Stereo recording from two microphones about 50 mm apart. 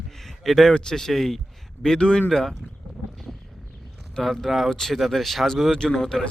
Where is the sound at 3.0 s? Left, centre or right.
Centre.